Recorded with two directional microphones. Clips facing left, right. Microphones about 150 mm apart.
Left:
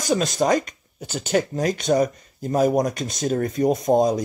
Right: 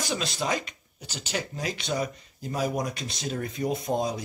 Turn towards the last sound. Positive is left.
turn(degrees=45)  # may be behind; listen again after turning